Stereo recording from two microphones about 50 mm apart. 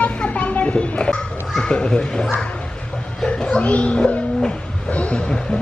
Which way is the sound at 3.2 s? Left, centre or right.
Left.